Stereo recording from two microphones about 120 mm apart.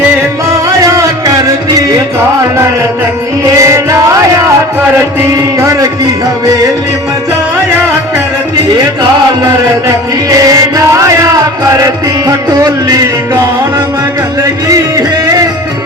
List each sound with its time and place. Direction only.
0.5 s music: 25° right (ahead or behind)
3.6 s music: 25° right (ahead or behind)
5.5 s music: 25° right (ahead or behind)
9.8 s music: 30° right (ahead or behind)
14.7 s music: 30° right (ahead or behind)